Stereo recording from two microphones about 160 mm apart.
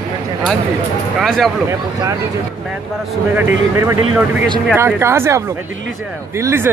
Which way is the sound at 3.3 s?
15° right (ahead or behind).